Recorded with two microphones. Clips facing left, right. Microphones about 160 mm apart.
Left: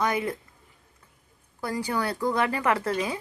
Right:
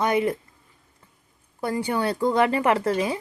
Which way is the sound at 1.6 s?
25° right (ahead or behind).